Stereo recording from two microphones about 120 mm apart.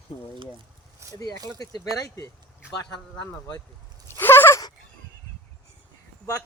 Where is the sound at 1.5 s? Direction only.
30° left (ahead or behind).